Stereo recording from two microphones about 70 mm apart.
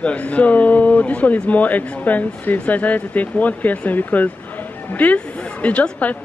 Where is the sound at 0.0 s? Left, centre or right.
Centre.